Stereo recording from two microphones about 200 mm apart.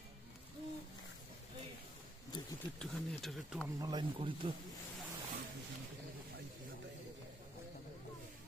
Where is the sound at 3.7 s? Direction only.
20° right (ahead or behind).